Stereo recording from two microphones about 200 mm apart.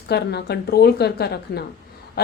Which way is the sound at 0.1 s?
55° left (ahead or behind).